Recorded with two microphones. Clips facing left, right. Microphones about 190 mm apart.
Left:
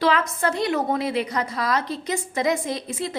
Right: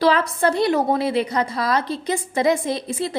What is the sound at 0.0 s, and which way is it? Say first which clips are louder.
A woman's voice: right 4 dB; 35° right (ahead or behind).